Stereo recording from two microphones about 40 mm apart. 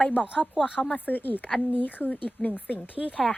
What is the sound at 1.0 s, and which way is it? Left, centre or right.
Speech, left.